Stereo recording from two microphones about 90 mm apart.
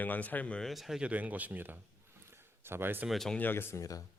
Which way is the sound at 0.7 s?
Centre (ahead or behind).